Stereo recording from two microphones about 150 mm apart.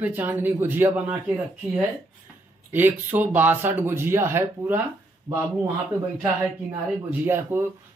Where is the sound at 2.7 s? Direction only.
10° right (ahead or behind).